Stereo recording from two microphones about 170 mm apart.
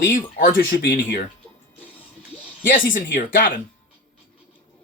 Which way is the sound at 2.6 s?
55° left (ahead or behind).